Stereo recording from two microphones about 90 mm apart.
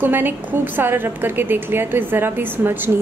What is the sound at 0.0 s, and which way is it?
A woman's voice, 20° right (ahead or behind).